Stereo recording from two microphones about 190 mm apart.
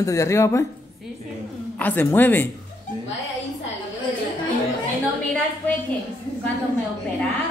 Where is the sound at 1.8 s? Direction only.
10° left (ahead or behind).